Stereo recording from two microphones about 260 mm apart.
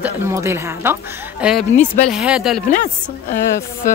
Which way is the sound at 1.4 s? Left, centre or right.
Centre.